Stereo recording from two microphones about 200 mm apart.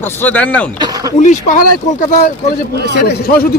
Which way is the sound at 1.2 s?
40° left (ahead or behind).